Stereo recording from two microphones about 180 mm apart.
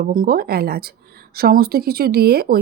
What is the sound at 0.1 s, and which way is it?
Speech, 55° right (ahead or behind).